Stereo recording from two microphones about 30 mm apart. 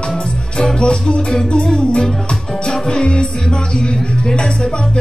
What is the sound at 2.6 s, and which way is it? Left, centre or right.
Music, left.